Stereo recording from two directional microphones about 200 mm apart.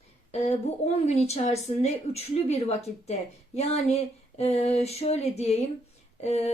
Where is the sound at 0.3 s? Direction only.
35° left (ahead or behind).